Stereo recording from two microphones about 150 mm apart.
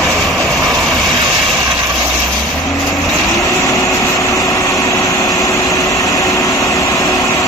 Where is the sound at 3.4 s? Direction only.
20° left (ahead or behind).